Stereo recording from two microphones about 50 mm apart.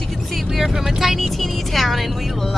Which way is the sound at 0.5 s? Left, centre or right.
Centre.